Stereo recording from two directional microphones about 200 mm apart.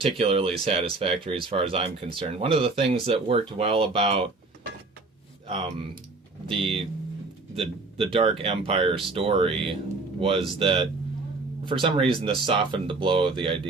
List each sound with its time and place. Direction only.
0.0 s speech: 30° right (ahead or behind)
5.5 s speech: 30° right (ahead or behind)